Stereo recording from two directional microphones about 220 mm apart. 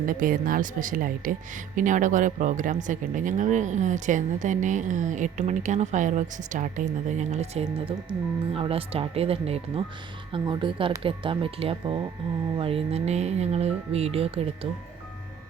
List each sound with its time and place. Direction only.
0.0 s a woman's voice: 40° right (ahead or behind)